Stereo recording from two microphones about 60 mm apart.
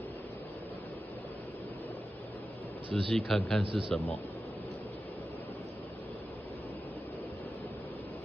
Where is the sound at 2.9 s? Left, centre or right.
Centre.